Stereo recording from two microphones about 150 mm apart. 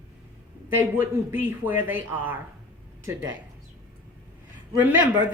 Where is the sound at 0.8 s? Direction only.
15° right (ahead or behind).